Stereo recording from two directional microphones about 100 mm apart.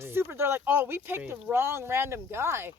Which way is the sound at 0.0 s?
25° right (ahead or behind).